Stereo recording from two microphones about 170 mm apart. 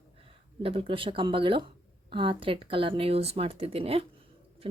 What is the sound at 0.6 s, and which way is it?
Speech, 35° right (ahead or behind).